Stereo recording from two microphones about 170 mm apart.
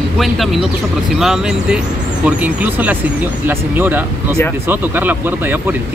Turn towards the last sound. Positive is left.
turn(degrees=-10)  # may be behind; listen again after turning